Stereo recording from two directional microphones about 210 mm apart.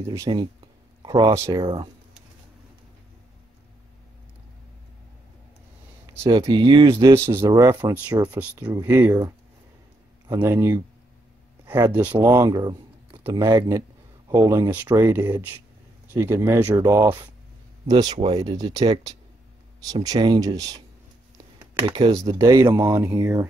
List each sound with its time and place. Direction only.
0.0 s speech: 15° right (ahead or behind)
6.1 s speech: 15° right (ahead or behind)
21.8 s speech: 20° right (ahead or behind)